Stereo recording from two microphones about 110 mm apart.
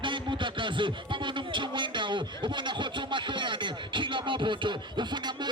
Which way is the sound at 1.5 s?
45° right (ahead or behind).